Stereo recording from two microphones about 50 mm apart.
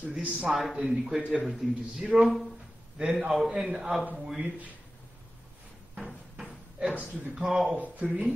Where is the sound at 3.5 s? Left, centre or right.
Centre.